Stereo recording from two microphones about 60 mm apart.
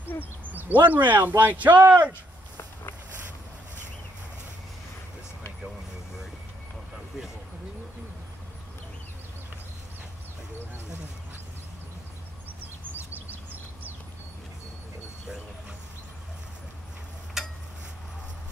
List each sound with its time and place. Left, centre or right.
0.5 s speech: right
12.9 s bird: right
17.4 s a sound: centre